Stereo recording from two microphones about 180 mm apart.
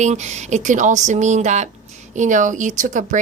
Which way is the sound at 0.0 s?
40° right (ahead or behind).